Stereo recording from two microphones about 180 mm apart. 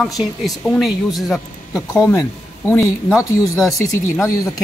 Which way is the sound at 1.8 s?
20° left (ahead or behind).